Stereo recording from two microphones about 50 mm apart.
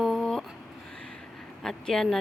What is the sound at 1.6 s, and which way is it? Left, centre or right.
Speech, centre.